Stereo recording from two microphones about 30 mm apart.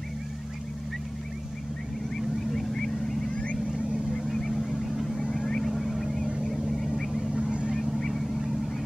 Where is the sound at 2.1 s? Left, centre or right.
Centre.